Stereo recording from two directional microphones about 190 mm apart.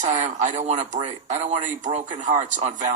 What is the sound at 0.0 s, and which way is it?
Speech, 40° right (ahead or behind).